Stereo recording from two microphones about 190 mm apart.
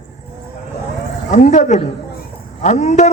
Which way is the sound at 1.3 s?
40° left (ahead or behind).